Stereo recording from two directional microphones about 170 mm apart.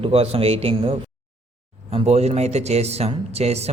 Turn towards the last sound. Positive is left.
turn(degrees=-40)  # may be behind; listen again after turning